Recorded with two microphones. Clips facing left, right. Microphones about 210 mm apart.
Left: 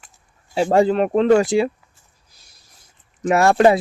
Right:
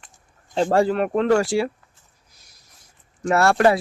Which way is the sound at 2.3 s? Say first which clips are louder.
Left 1 dB; 30° left (ahead or behind).